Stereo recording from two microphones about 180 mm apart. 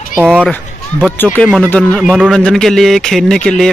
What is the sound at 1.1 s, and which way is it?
Speech, 10° left (ahead or behind).